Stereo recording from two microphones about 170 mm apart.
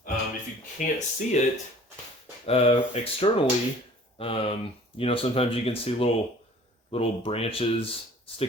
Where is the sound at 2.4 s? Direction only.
35° left (ahead or behind).